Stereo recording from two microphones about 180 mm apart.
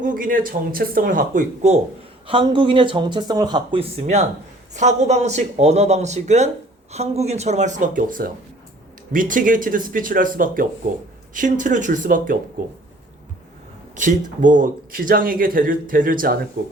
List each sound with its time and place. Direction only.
0.0 s speech: 50° right (ahead or behind)
2.2 s speech: 30° right (ahead or behind); by 12.4 s 50° right (ahead or behind)
13.9 s speech: 45° right (ahead or behind)